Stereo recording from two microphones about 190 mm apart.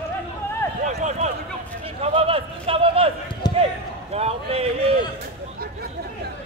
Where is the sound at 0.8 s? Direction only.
40° right (ahead or behind).